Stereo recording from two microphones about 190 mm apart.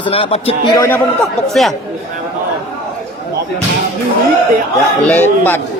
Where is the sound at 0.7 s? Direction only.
10° left (ahead or behind).